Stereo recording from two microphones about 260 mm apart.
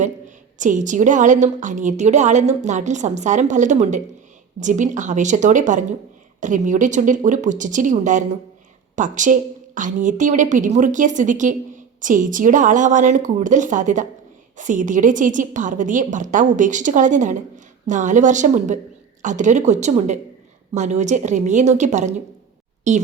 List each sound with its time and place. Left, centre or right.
0.6 s a woman's voice: right